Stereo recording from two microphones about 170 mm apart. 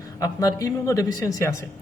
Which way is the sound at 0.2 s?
20° left (ahead or behind).